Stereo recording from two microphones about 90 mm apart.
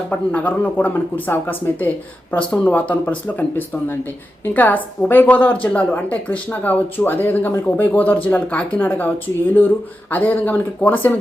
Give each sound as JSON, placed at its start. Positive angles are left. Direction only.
{"t": 0.1, "sound": "a woman's voice", "side_deg": 15}
{"t": 4.4, "sound": "a woman's voice", "side_deg": 20}